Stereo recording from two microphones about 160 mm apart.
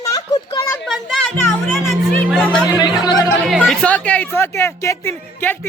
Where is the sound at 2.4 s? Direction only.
Centre (ahead or behind).